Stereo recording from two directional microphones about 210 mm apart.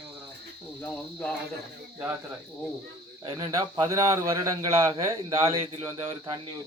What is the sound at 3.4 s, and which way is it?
Speech, 15° right (ahead or behind).